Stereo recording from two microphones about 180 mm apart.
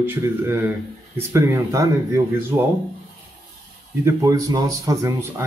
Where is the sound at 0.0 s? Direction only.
10° right (ahead or behind).